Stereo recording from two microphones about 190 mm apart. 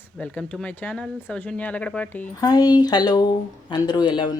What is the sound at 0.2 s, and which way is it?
Speech, 5° left (ahead or behind).